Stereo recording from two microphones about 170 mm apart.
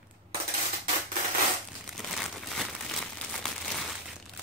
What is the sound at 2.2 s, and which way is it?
Crumpling, centre (ahead or behind).